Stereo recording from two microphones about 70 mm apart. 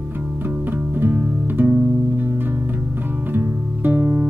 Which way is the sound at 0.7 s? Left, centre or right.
Right.